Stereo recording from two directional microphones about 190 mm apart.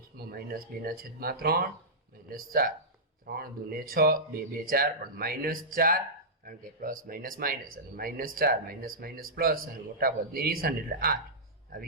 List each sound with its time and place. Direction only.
0.3 s speech: 50° right (ahead or behind)